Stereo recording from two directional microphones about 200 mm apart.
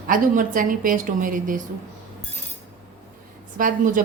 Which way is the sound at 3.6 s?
40° right (ahead or behind).